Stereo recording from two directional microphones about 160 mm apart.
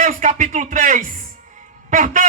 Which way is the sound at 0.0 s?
50° right (ahead or behind).